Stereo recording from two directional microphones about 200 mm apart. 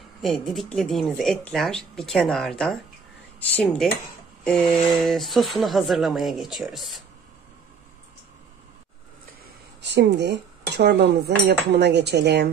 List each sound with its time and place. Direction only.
0.2 s speech: centre (ahead or behind)
9.8 s dishes: 60° right (ahead or behind)